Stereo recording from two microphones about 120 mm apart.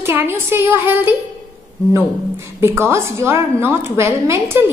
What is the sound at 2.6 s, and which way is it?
A woman's voice, 20° right (ahead or behind).